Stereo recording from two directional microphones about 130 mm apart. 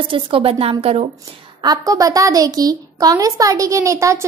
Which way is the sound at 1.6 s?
30° right (ahead or behind).